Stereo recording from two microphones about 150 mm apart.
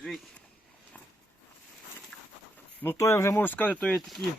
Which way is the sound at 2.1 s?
10° left (ahead or behind).